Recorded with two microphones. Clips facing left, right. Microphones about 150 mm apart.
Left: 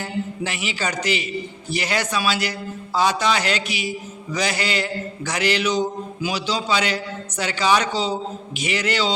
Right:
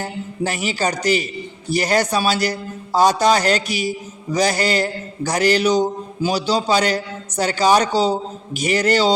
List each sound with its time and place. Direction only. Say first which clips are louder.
0.0 s a man's voice: right 2 dB; 40° right (ahead or behind)